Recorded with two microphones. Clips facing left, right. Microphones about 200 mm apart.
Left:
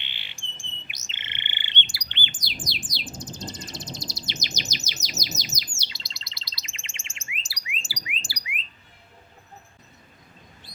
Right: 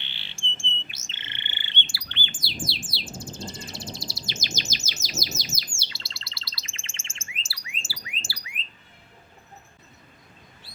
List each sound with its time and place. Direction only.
0.0 s bird: 15° left (ahead or behind)